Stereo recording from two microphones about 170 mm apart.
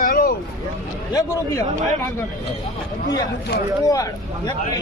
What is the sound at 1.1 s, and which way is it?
Speech, 20° left (ahead or behind).